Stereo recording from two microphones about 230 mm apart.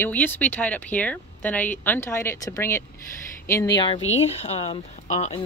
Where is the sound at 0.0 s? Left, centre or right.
Centre.